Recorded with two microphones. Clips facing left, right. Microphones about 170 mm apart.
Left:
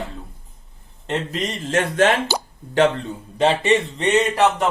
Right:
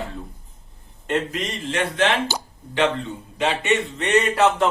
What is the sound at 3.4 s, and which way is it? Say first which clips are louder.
Speech: left 4 dB; 35° left (ahead or behind).